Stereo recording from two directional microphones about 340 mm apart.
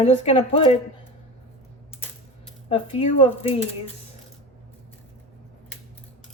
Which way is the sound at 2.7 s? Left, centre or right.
Centre.